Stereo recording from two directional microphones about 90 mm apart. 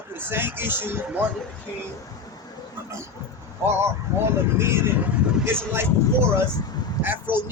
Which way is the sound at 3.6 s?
30° right (ahead or behind).